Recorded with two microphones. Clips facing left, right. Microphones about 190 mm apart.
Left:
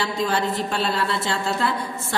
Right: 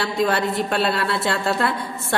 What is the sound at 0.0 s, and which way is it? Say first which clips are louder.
A woman's voice: right 2 dB; 60° right (ahead or behind).